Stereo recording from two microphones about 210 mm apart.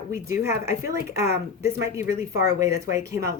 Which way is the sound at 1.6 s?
15° right (ahead or behind).